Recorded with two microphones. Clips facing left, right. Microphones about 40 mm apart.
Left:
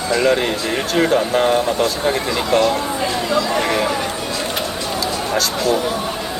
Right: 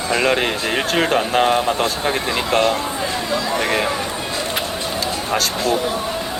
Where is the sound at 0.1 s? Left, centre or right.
Right.